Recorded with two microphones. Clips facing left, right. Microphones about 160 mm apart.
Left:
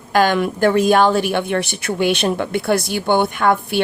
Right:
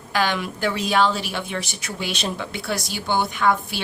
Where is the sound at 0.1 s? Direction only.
50° left (ahead or behind).